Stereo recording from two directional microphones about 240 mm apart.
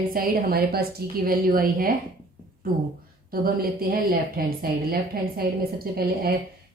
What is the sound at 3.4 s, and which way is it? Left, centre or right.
A woman's voice, right.